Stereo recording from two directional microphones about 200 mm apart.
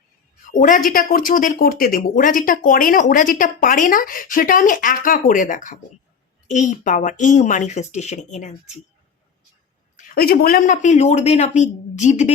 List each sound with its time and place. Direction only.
0.4 s a woman's voice: 40° left (ahead or behind)
10.0 s a woman's voice: 50° left (ahead or behind)